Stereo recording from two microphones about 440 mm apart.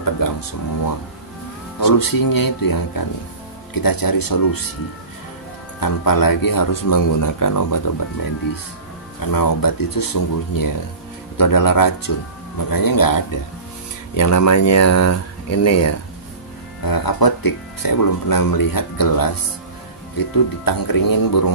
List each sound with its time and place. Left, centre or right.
0.0 s speech: left
5.8 s speech: left
9.2 s speech: left
16.8 s speech: left